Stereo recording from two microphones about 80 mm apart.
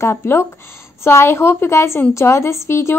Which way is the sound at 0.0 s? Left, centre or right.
Left.